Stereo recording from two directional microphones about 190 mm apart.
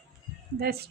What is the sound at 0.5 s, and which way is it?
Speech, 55° right (ahead or behind).